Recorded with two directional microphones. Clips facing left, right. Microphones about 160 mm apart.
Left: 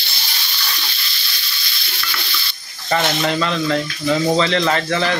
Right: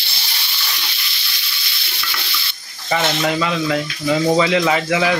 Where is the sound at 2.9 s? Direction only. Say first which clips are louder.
Even; 5° right (ahead or behind).